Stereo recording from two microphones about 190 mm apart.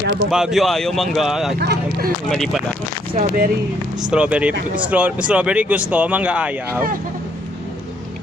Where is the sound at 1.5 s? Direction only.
55° right (ahead or behind).